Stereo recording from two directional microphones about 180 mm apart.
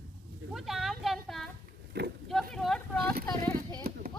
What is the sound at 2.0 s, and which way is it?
Speech, 65° right (ahead or behind).